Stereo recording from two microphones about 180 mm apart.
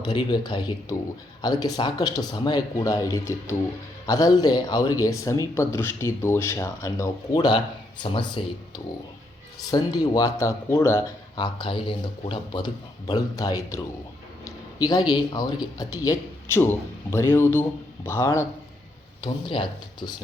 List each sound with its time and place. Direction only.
0.0 s speech: 25° left (ahead or behind)
19.2 s speech: 25° left (ahead or behind)